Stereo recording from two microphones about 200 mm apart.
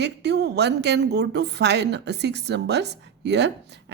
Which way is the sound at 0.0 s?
60° right (ahead or behind).